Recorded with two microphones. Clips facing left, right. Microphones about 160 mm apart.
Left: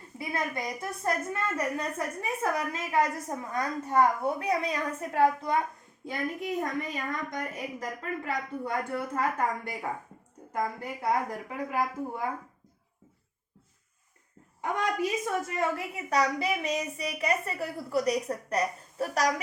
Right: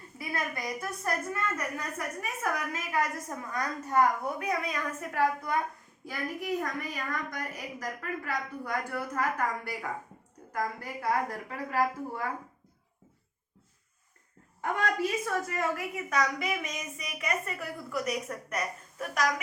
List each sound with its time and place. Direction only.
0.2 s a woman's voice: 25° left (ahead or behind)
10.5 s a woman's voice: 20° left (ahead or behind)
14.6 s a woman's voice: 15° left (ahead or behind); by 19.3 s 35° left (ahead or behind)